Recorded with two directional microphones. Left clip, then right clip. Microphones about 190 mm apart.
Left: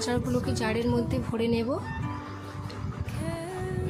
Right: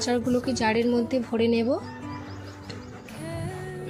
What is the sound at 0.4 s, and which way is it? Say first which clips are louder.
A woman's voice: right 5 dB; 15° right (ahead or behind).